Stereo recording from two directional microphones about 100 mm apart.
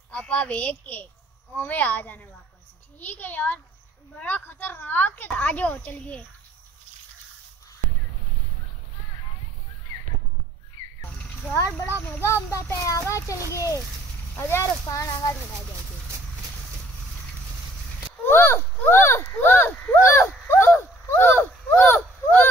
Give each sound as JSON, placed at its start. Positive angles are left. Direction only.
{"t": 0.1, "sound": "a woman's voice", "side_deg": 10}
{"t": 11.1, "sound": "a sound", "side_deg": 15}
{"t": 11.5, "sound": "a child's voice", "side_deg": 25}
{"t": 18.2, "sound": "speech", "side_deg": 25}